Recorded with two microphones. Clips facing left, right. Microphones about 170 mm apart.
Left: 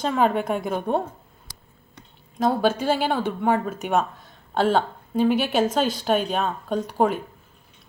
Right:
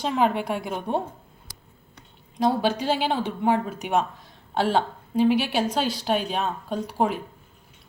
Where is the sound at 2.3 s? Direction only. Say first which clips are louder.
Left 1 dB; 45° left (ahead or behind).